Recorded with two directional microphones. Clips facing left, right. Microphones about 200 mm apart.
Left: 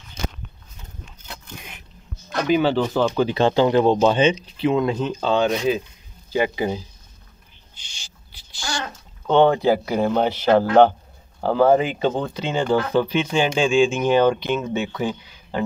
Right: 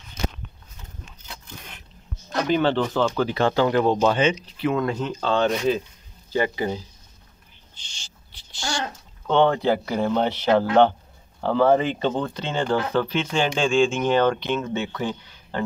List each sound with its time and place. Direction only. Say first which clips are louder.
2.2 s speech: left 2 dB; 5° left (ahead or behind)
7.8 s owl: left 1 dB; 10° left (ahead or behind)
9.3 s speech: left 3 dB; 10° left (ahead or behind)
11.4 s speech: left 2 dB; 10° left (ahead or behind)